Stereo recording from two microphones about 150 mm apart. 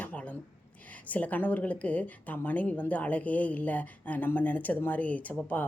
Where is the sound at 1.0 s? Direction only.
10° left (ahead or behind).